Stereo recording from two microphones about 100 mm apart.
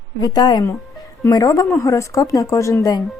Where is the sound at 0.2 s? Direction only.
40° left (ahead or behind).